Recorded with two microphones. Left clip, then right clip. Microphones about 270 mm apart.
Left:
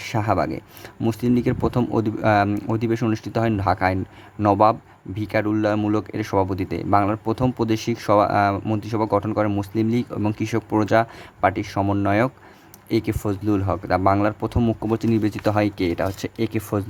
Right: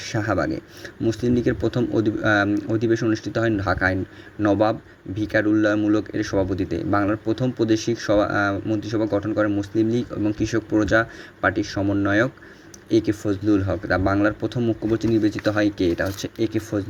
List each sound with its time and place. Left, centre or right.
0.0 s speech: centre